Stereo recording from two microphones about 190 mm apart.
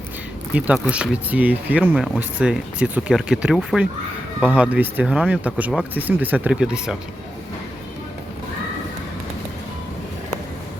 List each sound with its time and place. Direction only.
0.5 s speech: 5° right (ahead or behind)